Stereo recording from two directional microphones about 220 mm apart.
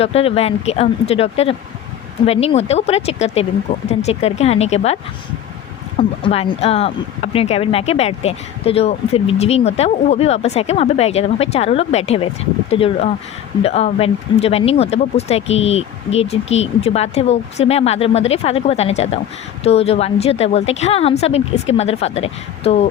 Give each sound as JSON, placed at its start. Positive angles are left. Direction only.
{"t": 0.0, "sound": "speech", "side_deg": 25}
{"t": 6.0, "sound": "speech", "side_deg": 25}